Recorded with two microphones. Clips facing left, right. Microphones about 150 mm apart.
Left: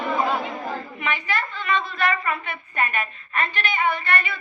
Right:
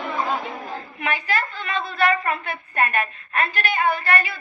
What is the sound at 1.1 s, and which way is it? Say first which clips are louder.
A woman's voice: right 2 dB; 40° right (ahead or behind).